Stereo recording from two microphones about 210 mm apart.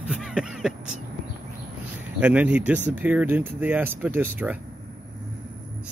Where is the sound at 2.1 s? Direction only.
5° right (ahead or behind).